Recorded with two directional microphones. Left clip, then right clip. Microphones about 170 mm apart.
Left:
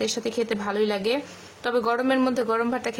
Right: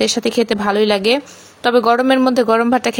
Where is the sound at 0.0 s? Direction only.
45° right (ahead or behind).